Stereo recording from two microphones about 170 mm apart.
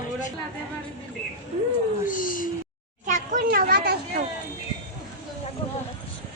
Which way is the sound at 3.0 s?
55° right (ahead or behind).